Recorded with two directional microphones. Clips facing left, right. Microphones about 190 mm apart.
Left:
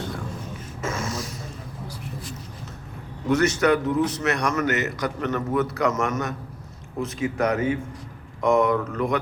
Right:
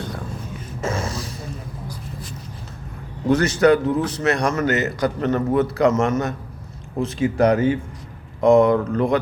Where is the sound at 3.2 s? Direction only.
30° right (ahead or behind).